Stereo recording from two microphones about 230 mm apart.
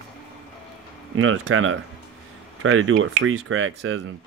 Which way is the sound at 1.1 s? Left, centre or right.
Right.